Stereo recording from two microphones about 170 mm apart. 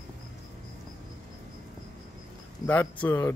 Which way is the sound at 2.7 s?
10° left (ahead or behind).